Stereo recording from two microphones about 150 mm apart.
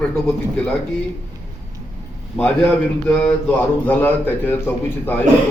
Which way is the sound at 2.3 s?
5° left (ahead or behind).